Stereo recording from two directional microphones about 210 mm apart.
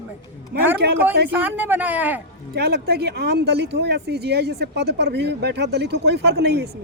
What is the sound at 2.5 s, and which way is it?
Speech, 50° right (ahead or behind).